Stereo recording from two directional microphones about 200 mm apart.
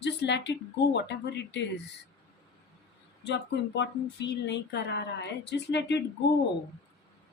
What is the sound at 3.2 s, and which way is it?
Speech, 60° left (ahead or behind).